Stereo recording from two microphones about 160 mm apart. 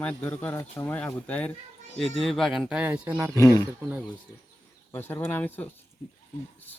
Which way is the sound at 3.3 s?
20° left (ahead or behind).